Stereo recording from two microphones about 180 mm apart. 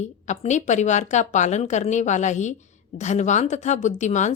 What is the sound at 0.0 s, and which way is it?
A woman's voice, 40° left (ahead or behind).